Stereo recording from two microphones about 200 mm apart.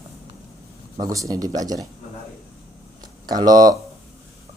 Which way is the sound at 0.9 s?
15° right (ahead or behind).